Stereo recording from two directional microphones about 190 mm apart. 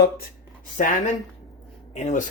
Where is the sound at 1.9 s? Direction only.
40° left (ahead or behind).